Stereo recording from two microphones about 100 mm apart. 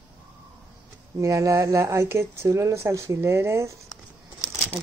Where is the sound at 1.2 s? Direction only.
30° right (ahead or behind).